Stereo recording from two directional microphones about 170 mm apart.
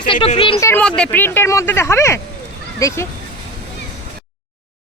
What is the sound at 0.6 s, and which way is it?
Speech, 15° left (ahead or behind).